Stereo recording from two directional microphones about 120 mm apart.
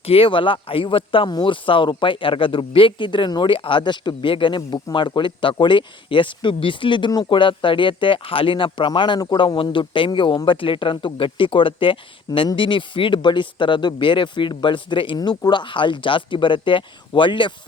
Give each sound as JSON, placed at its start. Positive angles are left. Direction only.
{"t": 0.0, "sound": "speech", "side_deg": 50}